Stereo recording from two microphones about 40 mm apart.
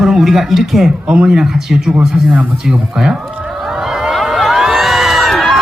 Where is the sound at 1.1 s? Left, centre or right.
Centre.